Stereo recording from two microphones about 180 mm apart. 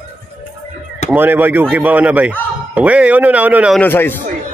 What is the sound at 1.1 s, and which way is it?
Speech, 10° right (ahead or behind).